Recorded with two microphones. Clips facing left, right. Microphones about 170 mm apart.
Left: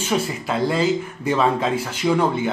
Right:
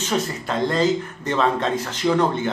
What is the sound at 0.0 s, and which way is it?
Speech, 10° left (ahead or behind).